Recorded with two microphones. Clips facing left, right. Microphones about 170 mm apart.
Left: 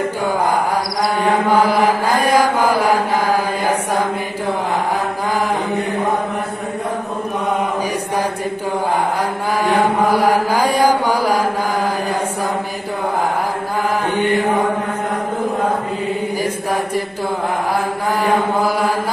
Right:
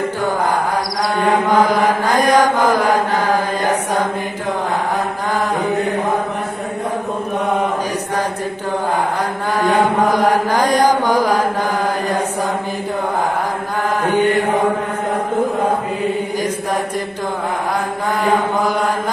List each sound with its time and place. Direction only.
1.5 s chant: 10° left (ahead or behind)
9.6 s chant: 10° left (ahead or behind)